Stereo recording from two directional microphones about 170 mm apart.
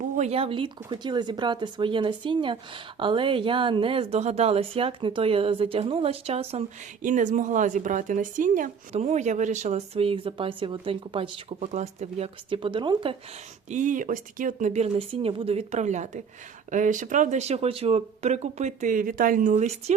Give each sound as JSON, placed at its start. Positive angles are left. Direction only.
{"t": 0.2, "sound": "speech", "side_deg": -35}
{"t": 13.7, "sound": "speech", "side_deg": -45}